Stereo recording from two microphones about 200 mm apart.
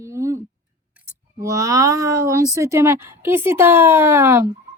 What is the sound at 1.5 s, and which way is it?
Speech, 15° right (ahead or behind).